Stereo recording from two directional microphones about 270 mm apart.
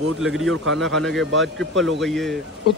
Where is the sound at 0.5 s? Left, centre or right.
Right.